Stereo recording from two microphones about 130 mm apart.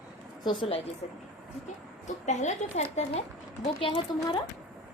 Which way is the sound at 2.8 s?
60° left (ahead or behind).